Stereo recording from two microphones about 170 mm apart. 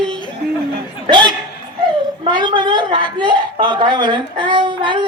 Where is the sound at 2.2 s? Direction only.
25° right (ahead or behind).